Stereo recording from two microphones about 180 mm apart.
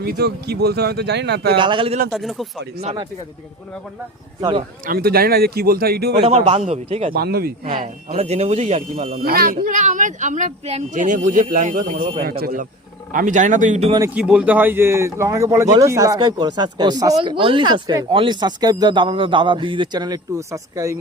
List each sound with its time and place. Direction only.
0.0 s speech: 60° right (ahead or behind)
1.5 s speech: 25° right (ahead or behind)
2.0 s speech: centre (ahead or behind)
2.8 s speech: 25° right (ahead or behind)
4.4 s speech: 25° right (ahead or behind)
4.9 s speech: 60° right (ahead or behind)
6.2 s a man's voice: 35° right (ahead or behind)
7.1 s speech: 60° right (ahead or behind)
8.1 s a man's voice: 35° right (ahead or behind)
9.2 s speech: 55° right (ahead or behind); by 13.9 s 40° right (ahead or behind)
14.1 s speech: 5° right (ahead or behind)